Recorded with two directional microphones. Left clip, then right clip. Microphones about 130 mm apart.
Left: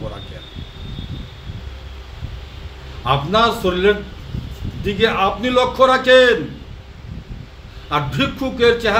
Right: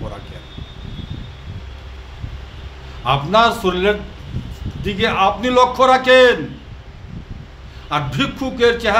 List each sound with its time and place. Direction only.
3.0 s a man's voice: 30° right (ahead or behind)
7.9 s a man's voice: 30° right (ahead or behind)